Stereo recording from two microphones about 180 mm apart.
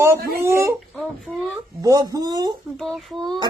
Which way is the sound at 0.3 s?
15° right (ahead or behind).